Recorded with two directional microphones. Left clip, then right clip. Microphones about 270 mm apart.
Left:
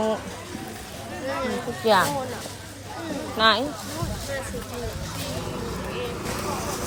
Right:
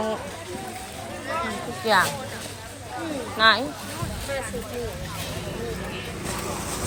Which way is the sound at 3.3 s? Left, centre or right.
Centre.